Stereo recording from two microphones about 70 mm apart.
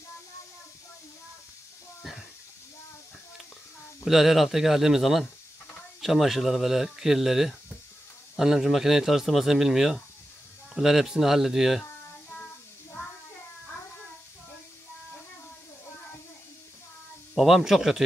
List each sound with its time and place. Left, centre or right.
4.0 s speech: centre
11.8 s child singing: left
17.4 s speech: centre